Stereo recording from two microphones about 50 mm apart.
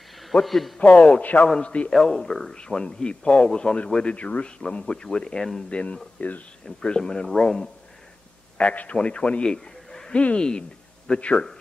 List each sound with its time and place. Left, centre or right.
0.3 s a man's voice: centre
0.9 s speech: centre
1.2 s a man's voice: left
1.9 s a man's voice: centre
5.7 s a man's voice: left
7.0 s speech: centre
8.5 s a man's voice: left
9.5 s a sound: centre
10.1 s a man's voice: centre